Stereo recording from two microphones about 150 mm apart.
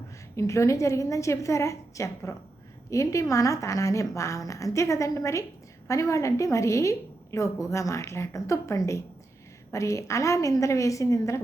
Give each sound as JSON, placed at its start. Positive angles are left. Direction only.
{"t": 0.3, "sound": "a woman's voice", "side_deg": 20}